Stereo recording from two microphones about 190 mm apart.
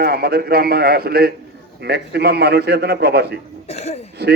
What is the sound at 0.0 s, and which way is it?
Speech, 55° right (ahead or behind).